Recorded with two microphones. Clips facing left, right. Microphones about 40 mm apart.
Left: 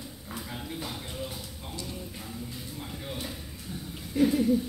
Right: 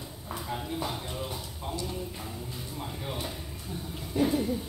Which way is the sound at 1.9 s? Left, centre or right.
Centre.